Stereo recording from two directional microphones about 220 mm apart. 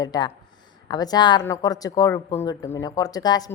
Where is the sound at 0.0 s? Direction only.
20° left (ahead or behind).